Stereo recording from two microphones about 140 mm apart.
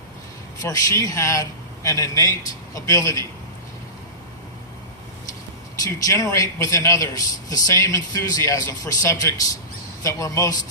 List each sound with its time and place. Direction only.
0.6 s a man's voice: 25° left (ahead or behind)
5.8 s a man's voice: 25° left (ahead or behind)